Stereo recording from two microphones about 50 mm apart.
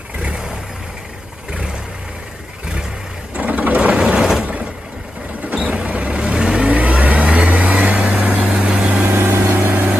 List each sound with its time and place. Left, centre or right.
0.2 s vehicle: centre
3.3 s sewing machine: right
3.9 s vehicle: centre
4.4 s vehicle: right
6.7 s vehicle: right
9.5 s vehicle: right